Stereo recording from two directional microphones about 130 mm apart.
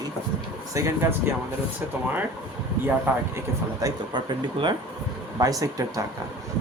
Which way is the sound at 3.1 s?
15° right (ahead or behind).